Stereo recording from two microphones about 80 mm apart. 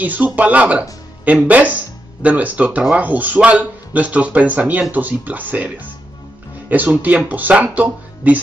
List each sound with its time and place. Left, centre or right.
0.0 s a man's voice: centre
7.0 s a man's voice: centre